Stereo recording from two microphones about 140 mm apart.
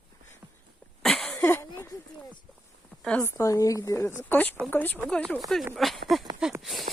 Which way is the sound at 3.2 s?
20° left (ahead or behind).